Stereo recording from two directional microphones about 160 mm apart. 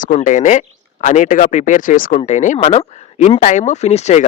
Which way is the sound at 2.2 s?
45° left (ahead or behind).